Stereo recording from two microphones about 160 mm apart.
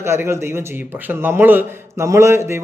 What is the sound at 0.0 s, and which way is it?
Speech, 15° right (ahead or behind).